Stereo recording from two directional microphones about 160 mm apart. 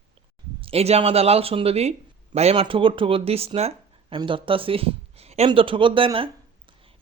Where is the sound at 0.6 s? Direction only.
40° right (ahead or behind).